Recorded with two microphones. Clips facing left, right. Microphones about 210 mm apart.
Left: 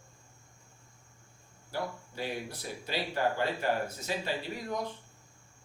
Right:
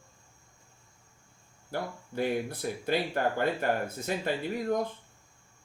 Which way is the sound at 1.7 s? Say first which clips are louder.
Right 3 dB; 50° right (ahead or behind).